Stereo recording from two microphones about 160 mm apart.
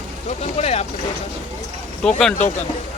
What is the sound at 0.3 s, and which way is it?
Speech, 45° left (ahead or behind).